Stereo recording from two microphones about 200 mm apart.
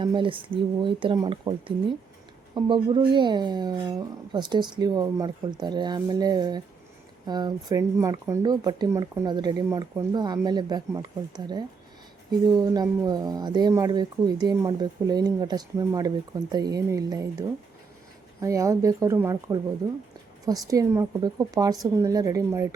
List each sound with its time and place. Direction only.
0.0 s a woman's voice: 25° right (ahead or behind)